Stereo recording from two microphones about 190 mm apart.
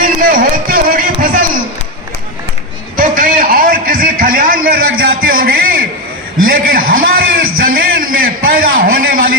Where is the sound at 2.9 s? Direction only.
50° right (ahead or behind).